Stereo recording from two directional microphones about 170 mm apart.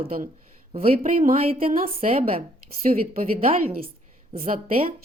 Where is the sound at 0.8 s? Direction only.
55° right (ahead or behind).